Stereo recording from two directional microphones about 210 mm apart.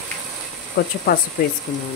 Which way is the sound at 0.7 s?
45° left (ahead or behind).